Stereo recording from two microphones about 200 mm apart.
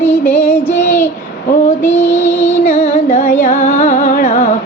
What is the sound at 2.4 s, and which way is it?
Music, 35° left (ahead or behind).